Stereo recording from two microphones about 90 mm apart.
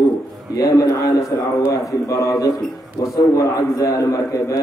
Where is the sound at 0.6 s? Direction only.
40° left (ahead or behind).